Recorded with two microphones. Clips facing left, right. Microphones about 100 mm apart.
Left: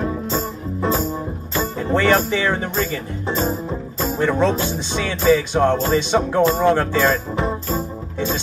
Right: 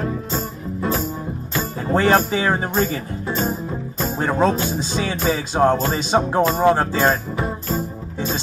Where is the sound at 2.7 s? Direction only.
25° right (ahead or behind).